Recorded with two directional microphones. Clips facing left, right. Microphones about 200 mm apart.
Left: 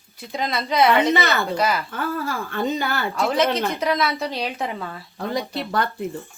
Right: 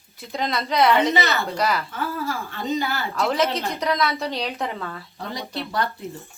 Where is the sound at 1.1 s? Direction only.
50° left (ahead or behind).